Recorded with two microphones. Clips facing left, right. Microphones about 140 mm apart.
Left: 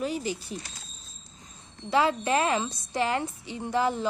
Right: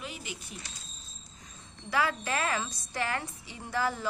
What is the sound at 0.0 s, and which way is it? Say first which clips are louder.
Speech: left 12 dB; 40° left (ahead or behind).